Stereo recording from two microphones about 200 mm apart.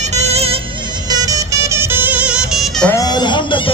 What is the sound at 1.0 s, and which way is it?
Music, 20° right (ahead or behind).